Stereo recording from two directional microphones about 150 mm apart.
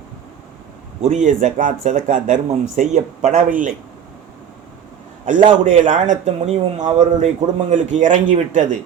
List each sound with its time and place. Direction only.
1.0 s speech: 55° right (ahead or behind)
5.2 s a man's voice: 55° right (ahead or behind)